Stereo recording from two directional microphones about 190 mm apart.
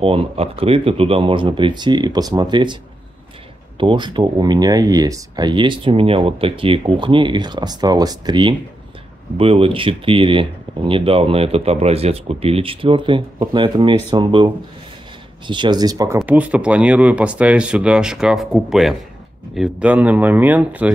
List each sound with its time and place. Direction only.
0.0 s speech: 30° right (ahead or behind)
3.8 s speech: 25° right (ahead or behind)
16.2 s speech: 5° right (ahead or behind)